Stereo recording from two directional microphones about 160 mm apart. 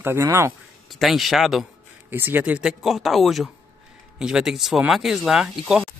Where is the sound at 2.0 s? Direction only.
10° right (ahead or behind).